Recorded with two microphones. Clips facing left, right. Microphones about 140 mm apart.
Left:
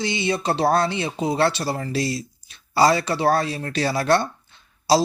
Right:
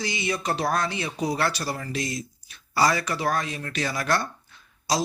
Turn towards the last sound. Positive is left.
turn(degrees=30)  # may be behind; listen again after turning